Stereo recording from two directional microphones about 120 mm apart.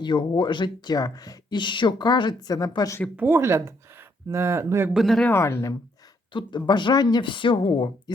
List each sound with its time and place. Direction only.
0.0 s speech: 40° left (ahead or behind)
3.2 s speech: 20° right (ahead or behind)
4.9 s speech: 5° left (ahead or behind)
5.3 s speech: 20° left (ahead or behind)
6.3 s speech: 40° left (ahead or behind)